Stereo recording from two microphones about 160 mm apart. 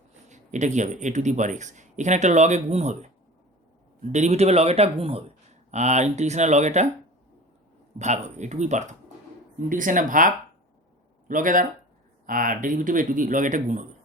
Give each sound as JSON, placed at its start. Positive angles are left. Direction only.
{"t": 0.3, "sound": "speech", "side_deg": -50}
{"t": 4.1, "sound": "speech", "side_deg": -45}
{"t": 7.9, "sound": "speech", "side_deg": -45}